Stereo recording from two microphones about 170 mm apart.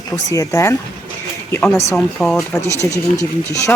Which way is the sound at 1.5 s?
5° left (ahead or behind).